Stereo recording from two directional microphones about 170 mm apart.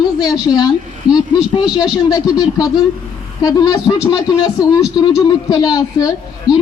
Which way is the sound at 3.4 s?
25° left (ahead or behind).